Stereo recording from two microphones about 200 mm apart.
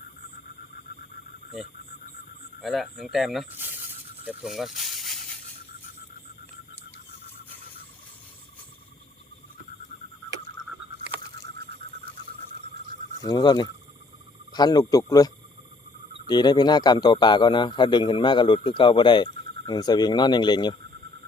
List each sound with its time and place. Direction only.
2.6 s speech: centre (ahead or behind)
13.2 s speech: 20° left (ahead or behind)